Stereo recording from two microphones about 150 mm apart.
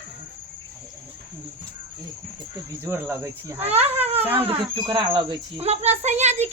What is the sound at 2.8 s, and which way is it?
Speech, 15° right (ahead or behind).